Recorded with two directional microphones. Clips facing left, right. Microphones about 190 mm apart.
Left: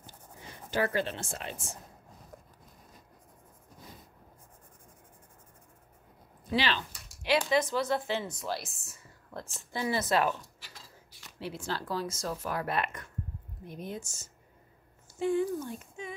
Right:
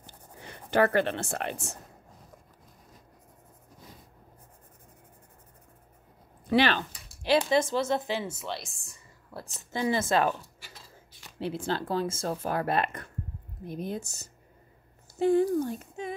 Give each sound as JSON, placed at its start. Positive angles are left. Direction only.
{"t": 0.7, "sound": "speech", "side_deg": -60}
{"t": 6.5, "sound": "speech", "side_deg": -55}
{"t": 7.4, "sound": "speech", "side_deg": -25}
{"t": 9.5, "sound": "a woman's voice", "side_deg": -20}
{"t": 11.3, "sound": "a woman's voice", "side_deg": -30}
{"t": 12.1, "sound": "speech", "side_deg": -50}
{"t": 12.6, "sound": "speech", "side_deg": -30}
{"t": 15.1, "sound": "speech", "side_deg": -35}